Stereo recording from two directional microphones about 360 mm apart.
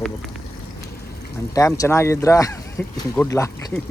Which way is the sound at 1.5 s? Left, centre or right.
Centre.